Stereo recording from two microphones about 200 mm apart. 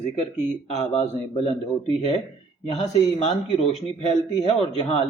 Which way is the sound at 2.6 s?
35° left (ahead or behind).